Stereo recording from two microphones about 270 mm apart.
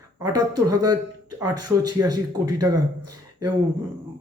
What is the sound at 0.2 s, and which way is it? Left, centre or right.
Speech, centre.